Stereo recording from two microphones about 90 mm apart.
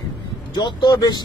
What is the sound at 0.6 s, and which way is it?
Speech, 60° left (ahead or behind).